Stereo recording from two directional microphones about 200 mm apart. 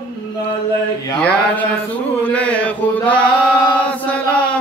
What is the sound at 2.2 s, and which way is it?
Chant, 5° left (ahead or behind).